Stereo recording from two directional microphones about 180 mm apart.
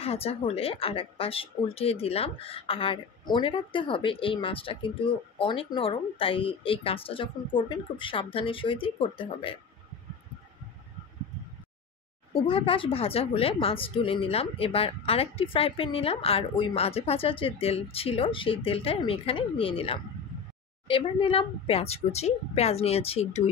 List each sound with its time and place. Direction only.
0.0 s a woman's voice: 35° left (ahead or behind)
12.4 s a woman's voice: 30° left (ahead or behind)